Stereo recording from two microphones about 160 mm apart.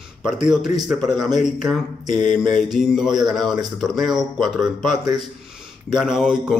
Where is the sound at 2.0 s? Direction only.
50° left (ahead or behind).